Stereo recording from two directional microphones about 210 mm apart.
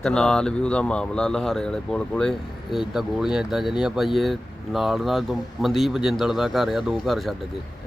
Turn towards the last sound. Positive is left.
turn(degrees=0)  # may be behind; listen again after turning